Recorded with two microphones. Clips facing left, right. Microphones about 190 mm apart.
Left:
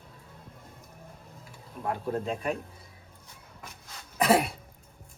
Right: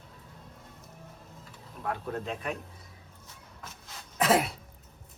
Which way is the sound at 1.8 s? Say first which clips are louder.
Left 3 dB; 30° left (ahead or behind).